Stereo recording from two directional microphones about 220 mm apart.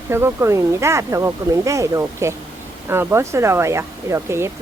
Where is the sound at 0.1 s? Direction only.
10° right (ahead or behind).